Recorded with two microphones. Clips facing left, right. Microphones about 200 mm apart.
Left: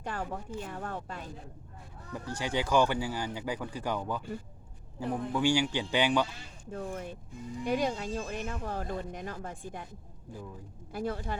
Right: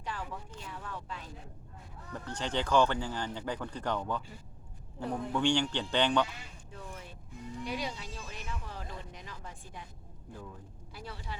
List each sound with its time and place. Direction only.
0.0 s speech: 50° left (ahead or behind)
2.1 s speech: 10° left (ahead or behind)
6.7 s speech: 50° left (ahead or behind)
10.9 s speech: 50° left (ahead or behind)